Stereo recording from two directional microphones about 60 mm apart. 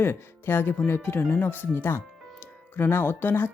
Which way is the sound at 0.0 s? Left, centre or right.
Left.